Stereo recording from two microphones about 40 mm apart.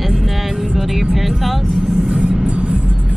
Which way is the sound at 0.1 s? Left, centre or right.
Centre.